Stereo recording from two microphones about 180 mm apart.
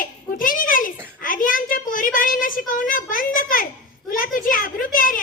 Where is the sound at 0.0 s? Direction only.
50° left (ahead or behind).